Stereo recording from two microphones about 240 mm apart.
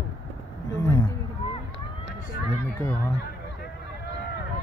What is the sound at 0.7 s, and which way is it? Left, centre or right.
Speech, centre.